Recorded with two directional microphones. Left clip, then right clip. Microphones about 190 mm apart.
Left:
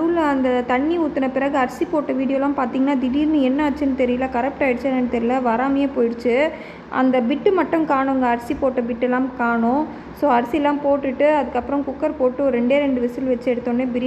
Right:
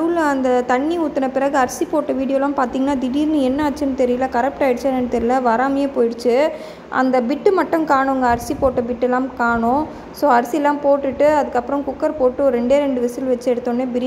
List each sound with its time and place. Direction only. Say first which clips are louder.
0.1 s a woman's voice: right 2 dB; 20° right (ahead or behind)
3.0 s a woman's voice: right 1 dB; 90° right
3.4 s a woman's voice: right 1 dB; 20° right (ahead or behind)